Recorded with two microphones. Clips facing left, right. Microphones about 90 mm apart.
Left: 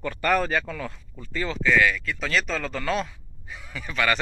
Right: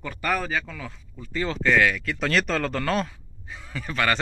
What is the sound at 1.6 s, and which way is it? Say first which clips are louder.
Speech: even; 60° right (ahead or behind).